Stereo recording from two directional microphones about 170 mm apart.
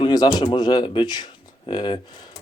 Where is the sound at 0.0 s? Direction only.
25° left (ahead or behind).